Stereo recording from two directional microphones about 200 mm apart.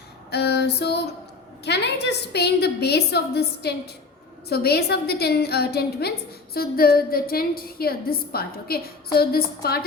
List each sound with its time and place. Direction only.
0.3 s female singing: 55° left (ahead or behind)
1.6 s a woman's voice: 55° left (ahead or behind)